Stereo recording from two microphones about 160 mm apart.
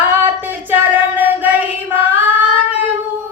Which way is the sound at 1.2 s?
10° right (ahead or behind).